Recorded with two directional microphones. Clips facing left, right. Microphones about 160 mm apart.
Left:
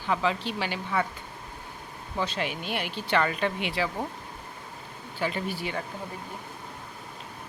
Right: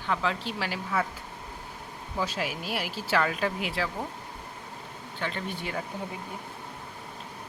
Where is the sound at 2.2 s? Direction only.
5° right (ahead or behind).